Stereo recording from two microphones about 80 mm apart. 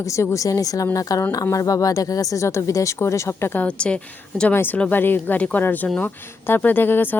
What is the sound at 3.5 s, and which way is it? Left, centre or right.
A woman's voice, centre.